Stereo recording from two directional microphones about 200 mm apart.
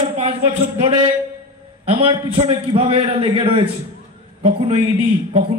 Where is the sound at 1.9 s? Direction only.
25° right (ahead or behind).